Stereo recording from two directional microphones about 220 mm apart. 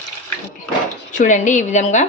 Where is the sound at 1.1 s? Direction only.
35° left (ahead or behind).